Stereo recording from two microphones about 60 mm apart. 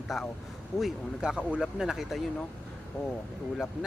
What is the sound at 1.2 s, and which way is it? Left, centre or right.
Speech, centre.